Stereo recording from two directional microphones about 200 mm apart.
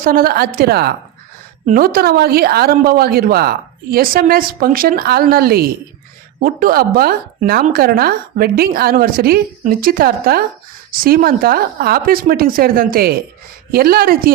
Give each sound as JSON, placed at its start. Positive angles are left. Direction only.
{"t": 0.0, "sound": "a woman's voice", "side_deg": -45}